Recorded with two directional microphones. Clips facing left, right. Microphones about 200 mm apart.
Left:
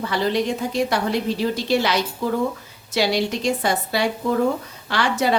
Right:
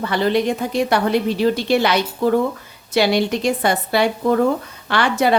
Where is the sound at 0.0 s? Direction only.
60° right (ahead or behind).